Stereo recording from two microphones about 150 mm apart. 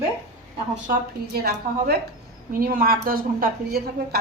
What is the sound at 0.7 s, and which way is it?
A woman's voice, 80° right.